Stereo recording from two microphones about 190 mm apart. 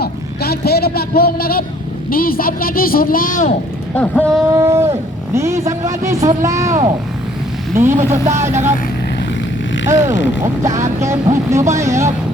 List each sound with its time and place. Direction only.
0.0 s a man's voice: 55° left (ahead or behind)
3.9 s speech: 10° left (ahead or behind)
4.5 s speech: 15° right (ahead or behind)
7.9 s speech: 35° right (ahead or behind)
9.8 s speech: 15° right (ahead or behind)